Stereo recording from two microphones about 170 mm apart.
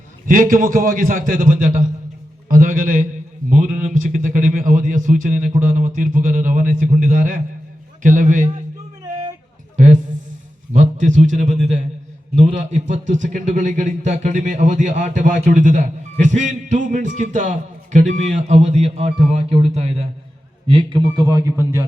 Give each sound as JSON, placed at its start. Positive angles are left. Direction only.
{"t": 0.3, "sound": "a man's voice", "side_deg": -55}
{"t": 9.7, "sound": "a sound", "side_deg": -45}
{"t": 10.8, "sound": "a man's voice", "side_deg": -45}